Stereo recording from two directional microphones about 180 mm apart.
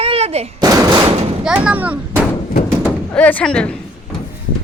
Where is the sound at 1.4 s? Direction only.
5° right (ahead or behind).